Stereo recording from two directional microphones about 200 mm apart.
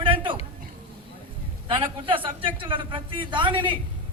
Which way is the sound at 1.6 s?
25° right (ahead or behind).